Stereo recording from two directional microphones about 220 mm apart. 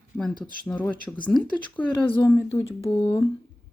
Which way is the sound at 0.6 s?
5° left (ahead or behind).